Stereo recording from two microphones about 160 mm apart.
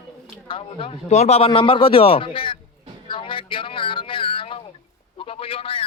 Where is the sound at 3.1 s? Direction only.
30° left (ahead or behind).